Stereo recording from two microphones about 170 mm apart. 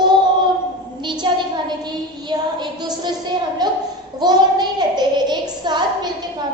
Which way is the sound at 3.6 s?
25° right (ahead or behind).